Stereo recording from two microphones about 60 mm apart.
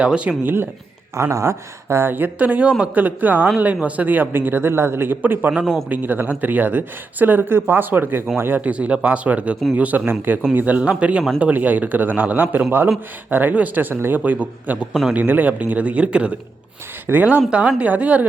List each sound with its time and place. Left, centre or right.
0.0 s speech: centre
0.4 s speech: right
1.1 s speech: right; by 2.9 s centre
2.9 s a man's voice: right
5.5 s speech: centre
5.9 s speech: right
8.6 s a man's voice: right
13.9 s speech: right
14.3 s a man's voice: right